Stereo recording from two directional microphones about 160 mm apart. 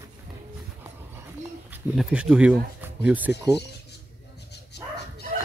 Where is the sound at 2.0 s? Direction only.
5° right (ahead or behind).